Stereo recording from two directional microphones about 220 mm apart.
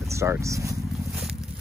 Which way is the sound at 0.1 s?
15° right (ahead or behind).